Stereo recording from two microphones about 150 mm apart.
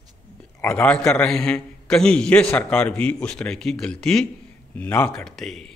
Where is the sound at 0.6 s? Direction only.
15° left (ahead or behind).